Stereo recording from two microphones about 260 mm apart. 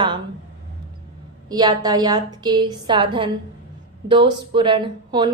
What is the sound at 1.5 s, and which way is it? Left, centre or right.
A woman's voice, centre.